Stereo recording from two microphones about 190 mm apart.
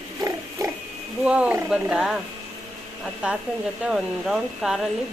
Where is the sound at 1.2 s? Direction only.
5° right (ahead or behind).